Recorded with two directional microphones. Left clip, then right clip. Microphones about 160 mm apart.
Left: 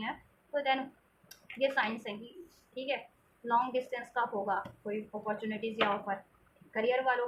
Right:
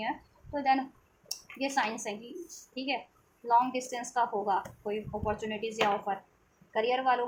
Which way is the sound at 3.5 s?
45° right (ahead or behind).